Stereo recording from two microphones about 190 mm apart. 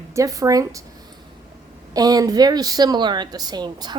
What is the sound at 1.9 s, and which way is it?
A woman's voice, 20° right (ahead or behind).